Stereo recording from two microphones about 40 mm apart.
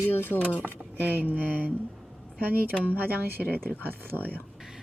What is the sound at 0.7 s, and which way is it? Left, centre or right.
Speech, right.